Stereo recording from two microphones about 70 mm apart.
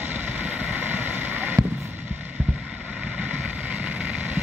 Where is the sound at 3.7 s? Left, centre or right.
Centre.